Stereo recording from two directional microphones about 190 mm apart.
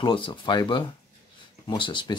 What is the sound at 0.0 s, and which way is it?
Speech, 25° left (ahead or behind).